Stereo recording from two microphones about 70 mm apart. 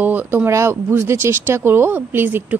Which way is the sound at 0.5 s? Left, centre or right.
Right.